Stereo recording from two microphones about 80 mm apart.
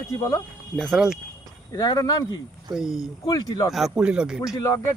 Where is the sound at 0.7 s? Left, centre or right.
Centre.